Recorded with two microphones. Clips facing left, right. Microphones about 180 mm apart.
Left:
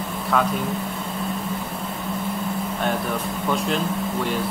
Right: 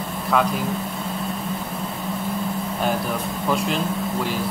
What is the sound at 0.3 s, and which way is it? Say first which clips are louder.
Speech: right 1 dB; centre (ahead or behind).